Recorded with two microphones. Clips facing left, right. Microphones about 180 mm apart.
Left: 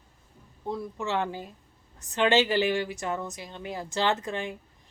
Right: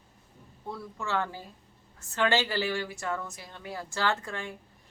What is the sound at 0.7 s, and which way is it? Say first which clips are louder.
A woman's voice: left 3 dB; 20° left (ahead or behind).